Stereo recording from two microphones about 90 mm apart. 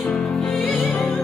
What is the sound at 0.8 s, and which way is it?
Music, 20° left (ahead or behind).